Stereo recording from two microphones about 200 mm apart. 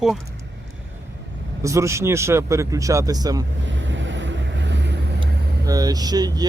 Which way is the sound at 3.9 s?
65° right (ahead or behind).